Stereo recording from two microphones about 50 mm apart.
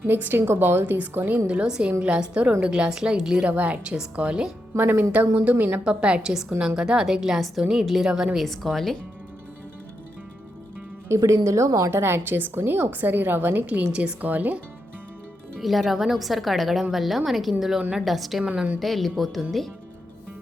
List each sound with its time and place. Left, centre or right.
0.0 s a woman's voice: right
1.9 s a woman's voice: right
2.9 s a woman's voice: centre
3.5 s a woman's voice: right
4.8 s a woman's voice: right
5.8 s a woman's voice: right
8.4 s speech: centre
11.1 s a woman's voice: right
11.9 s a woman's voice: right
13.8 s a woman's voice: right
14.2 s speech: right
15.5 s speech: centre
18.4 s a woman's voice: right
18.8 s speech: centre